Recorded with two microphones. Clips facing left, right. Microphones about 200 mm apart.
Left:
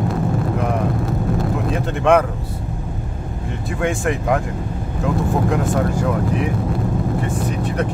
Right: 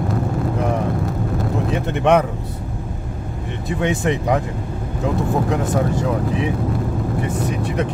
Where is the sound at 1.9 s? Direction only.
20° right (ahead or behind).